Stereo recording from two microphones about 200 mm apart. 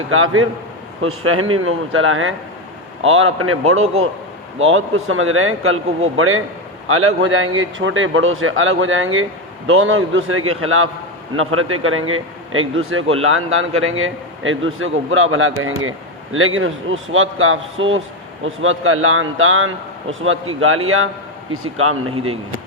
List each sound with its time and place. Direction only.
0.1 s a man's voice: 90° right